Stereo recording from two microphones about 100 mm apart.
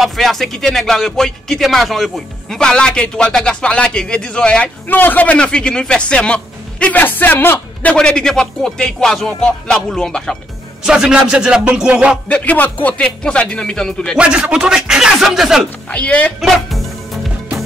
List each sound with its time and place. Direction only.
0.0 s speech: centre (ahead or behind)
10.9 s music: 10° right (ahead or behind)
12.3 s speech: 15° left (ahead or behind)
14.1 s speech: 10° right (ahead or behind)
15.9 s speech: 15° left (ahead or behind)
16.3 s music: centre (ahead or behind)